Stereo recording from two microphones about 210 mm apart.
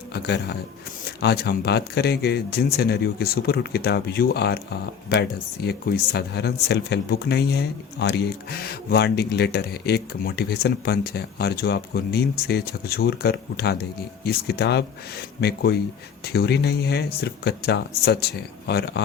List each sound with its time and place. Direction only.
0.1 s speech: 50° left (ahead or behind)
5.6 s speech: 45° left (ahead or behind)